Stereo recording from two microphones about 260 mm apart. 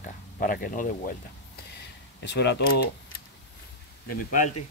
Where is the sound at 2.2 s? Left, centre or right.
Left.